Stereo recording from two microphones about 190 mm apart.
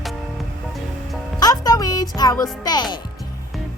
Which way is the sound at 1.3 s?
20° left (ahead or behind).